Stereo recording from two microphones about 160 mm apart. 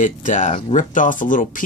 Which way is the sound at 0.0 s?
55° left (ahead or behind).